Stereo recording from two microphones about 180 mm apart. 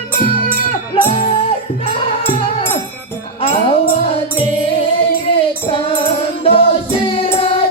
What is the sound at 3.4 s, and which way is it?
Music, 30° left (ahead or behind).